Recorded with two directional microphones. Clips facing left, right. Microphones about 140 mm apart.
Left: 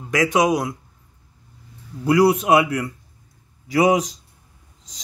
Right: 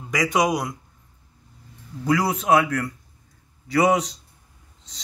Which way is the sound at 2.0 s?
10° left (ahead or behind).